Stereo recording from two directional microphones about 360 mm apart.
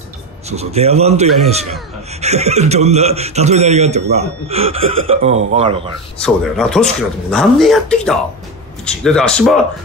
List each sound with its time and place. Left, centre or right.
0.5 s a man's voice: centre
6.1 s speech: centre